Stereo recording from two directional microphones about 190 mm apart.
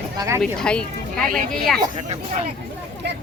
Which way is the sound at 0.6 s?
5° left (ahead or behind).